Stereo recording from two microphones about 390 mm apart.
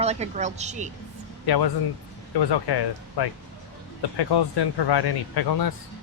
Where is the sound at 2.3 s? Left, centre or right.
Left.